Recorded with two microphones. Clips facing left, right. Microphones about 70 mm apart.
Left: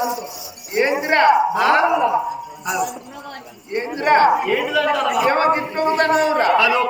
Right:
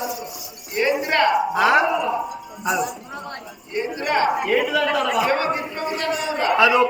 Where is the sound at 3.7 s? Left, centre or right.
Left.